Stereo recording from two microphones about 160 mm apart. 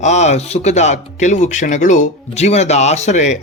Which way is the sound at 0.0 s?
45° left (ahead or behind).